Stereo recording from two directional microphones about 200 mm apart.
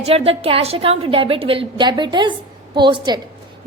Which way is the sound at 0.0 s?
30° right (ahead or behind).